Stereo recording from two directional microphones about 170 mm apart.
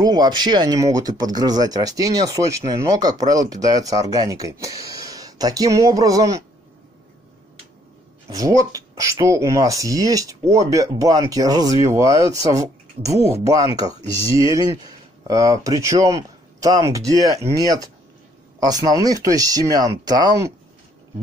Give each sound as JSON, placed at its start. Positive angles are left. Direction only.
{"t": 0.0, "sound": "speech", "side_deg": -25}
{"t": 8.3, "sound": "speech", "side_deg": -20}